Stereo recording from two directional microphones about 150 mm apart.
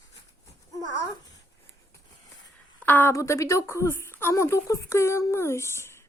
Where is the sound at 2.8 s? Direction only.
15° left (ahead or behind).